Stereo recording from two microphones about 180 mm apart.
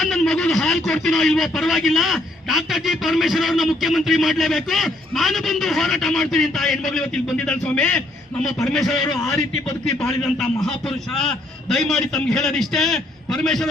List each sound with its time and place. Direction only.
0.0 s a man's voice: centre (ahead or behind)
10.3 s a man's voice: centre (ahead or behind)